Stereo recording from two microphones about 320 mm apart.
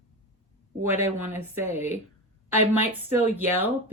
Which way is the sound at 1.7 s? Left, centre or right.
Left.